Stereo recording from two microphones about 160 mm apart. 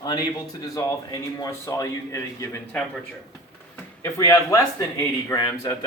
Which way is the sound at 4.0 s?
20° left (ahead or behind).